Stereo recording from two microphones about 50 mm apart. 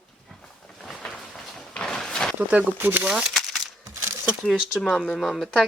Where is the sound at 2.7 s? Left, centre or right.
Right.